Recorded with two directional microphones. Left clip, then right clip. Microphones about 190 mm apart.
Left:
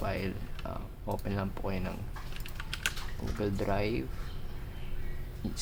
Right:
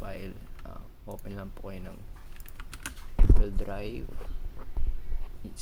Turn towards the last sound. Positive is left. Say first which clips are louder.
# left 7 dB
turn(degrees=-10)  # may be behind; listen again after turning